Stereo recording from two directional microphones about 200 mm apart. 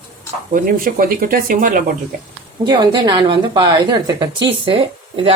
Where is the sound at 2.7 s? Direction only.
20° right (ahead or behind).